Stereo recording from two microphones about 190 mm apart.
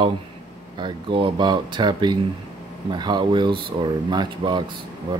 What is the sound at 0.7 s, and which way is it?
Speech, 25° right (ahead or behind).